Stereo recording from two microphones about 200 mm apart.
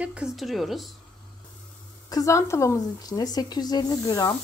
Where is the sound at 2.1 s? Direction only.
15° left (ahead or behind).